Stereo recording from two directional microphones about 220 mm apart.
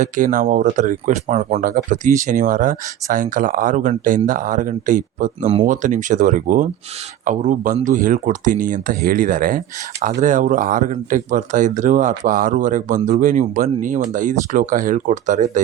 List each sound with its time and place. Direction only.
0.0 s speech: 35° right (ahead or behind)